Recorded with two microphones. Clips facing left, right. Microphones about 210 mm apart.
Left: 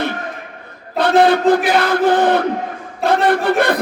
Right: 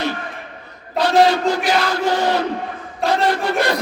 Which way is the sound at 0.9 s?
55° left (ahead or behind).